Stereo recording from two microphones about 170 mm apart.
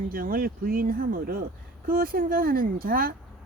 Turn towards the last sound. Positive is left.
turn(degrees=-55)  # may be behind; listen again after turning